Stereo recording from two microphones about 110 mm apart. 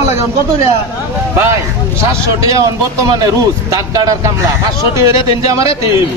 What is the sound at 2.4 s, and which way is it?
A man's voice, 30° right (ahead or behind).